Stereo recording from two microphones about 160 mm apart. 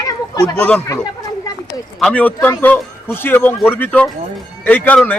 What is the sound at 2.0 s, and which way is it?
A man's voice, 5° left (ahead or behind).